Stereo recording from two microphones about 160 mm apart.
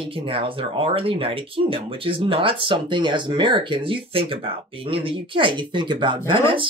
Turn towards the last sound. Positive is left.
turn(degrees=-30)  # may be behind; listen again after turning